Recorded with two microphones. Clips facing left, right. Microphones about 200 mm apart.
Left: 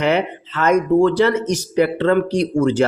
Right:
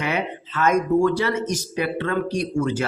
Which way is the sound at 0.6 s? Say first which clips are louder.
Left 4 dB; 70° left (ahead or behind).